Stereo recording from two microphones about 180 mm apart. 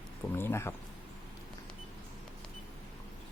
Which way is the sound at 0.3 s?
15° left (ahead or behind).